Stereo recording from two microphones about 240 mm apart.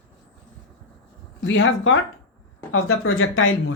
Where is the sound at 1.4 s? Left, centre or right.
Left.